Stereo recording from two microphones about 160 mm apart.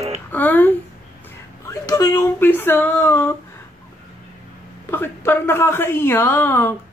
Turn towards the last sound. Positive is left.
turn(degrees=15)  # may be behind; listen again after turning